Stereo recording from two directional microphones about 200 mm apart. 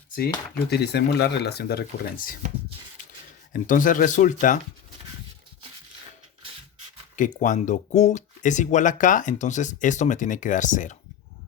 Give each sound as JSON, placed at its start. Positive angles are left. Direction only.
{"t": 0.7, "sound": "speech", "side_deg": 55}
{"t": 3.5, "sound": "speech", "side_deg": 40}
{"t": 7.2, "sound": "speech", "side_deg": 40}